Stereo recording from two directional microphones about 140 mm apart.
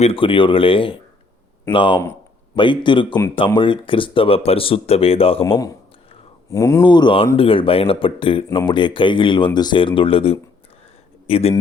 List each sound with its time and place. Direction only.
0.0 s speech: 40° left (ahead or behind)
6.5 s speech: 20° left (ahead or behind)
6.8 s speech: 35° left (ahead or behind)